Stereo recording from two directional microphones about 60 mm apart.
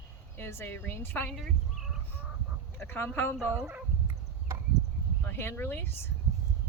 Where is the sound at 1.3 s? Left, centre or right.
Centre.